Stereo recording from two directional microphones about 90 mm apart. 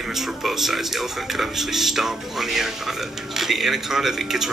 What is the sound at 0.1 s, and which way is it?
Speech, centre (ahead or behind).